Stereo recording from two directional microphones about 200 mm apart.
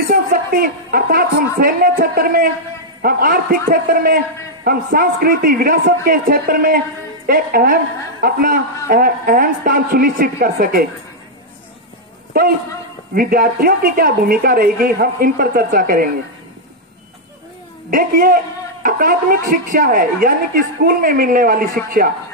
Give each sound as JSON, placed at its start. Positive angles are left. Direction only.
{"t": 0.0, "sound": "a woman's voice", "side_deg": -45}
{"t": 13.1, "sound": "a woman's voice", "side_deg": -45}
{"t": 17.8, "sound": "a woman's voice", "side_deg": -45}